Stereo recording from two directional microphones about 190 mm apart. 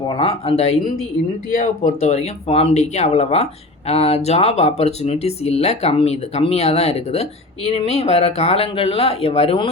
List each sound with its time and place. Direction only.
0.1 s speech: 30° left (ahead or behind)